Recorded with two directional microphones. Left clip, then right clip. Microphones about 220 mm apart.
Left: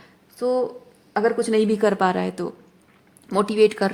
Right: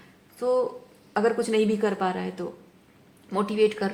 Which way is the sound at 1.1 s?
30° left (ahead or behind).